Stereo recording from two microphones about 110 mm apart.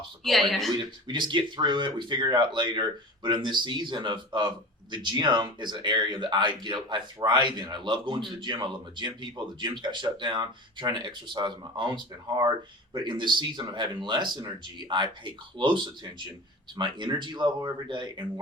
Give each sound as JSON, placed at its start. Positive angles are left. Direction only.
{"t": 0.3, "sound": "speech", "side_deg": 0}
{"t": 0.8, "sound": "speech", "side_deg": -45}